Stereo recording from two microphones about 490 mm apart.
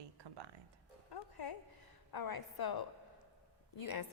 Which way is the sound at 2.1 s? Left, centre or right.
Left.